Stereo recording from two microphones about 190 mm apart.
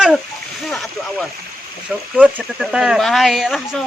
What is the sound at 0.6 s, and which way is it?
Speech, centre (ahead or behind).